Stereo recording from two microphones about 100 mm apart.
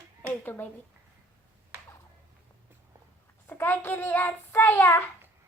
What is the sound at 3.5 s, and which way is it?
Child singing, 20° left (ahead or behind).